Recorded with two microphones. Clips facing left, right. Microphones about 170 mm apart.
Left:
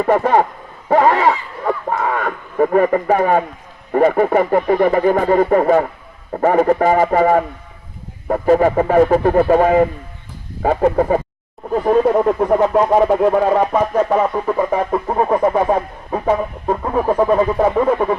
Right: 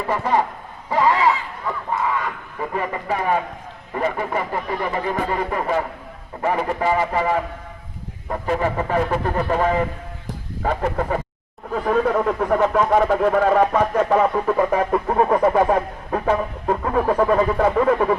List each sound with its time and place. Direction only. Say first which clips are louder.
0.0 s speech: left 7 dB; 55° left (ahead or behind)
11.7 s speech: left 6 dB; 30° left (ahead or behind); by 18.1 s 10° left (ahead or behind)